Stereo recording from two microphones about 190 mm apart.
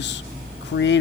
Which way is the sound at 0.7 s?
70° left (ahead or behind).